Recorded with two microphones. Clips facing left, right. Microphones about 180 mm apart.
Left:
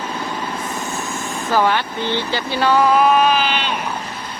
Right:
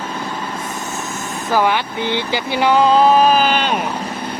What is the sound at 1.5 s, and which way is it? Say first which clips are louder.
Speech: right 1 dB; 15° right (ahead or behind).